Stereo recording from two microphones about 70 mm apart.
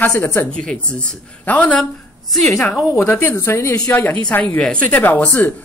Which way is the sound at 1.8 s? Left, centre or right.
Centre.